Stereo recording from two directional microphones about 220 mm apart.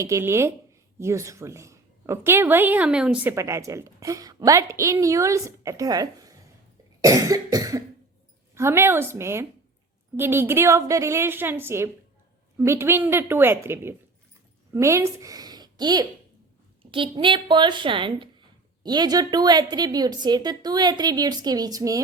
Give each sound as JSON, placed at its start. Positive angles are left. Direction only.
{"t": 0.0, "sound": "a woman's voice", "side_deg": -15}